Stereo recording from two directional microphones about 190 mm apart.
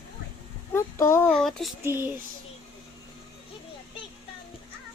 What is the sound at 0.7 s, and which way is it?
Speech, 15° left (ahead or behind).